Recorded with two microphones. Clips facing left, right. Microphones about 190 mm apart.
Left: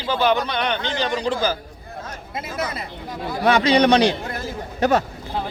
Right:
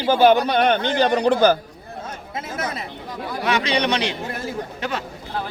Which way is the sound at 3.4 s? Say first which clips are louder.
Left 6 dB; 35° left (ahead or behind).